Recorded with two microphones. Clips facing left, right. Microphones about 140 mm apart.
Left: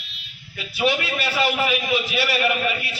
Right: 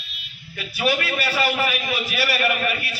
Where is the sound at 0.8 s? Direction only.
20° left (ahead or behind).